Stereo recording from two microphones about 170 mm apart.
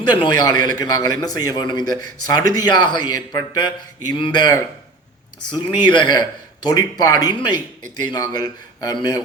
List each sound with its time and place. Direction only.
0.0 s a man's voice: 25° left (ahead or behind)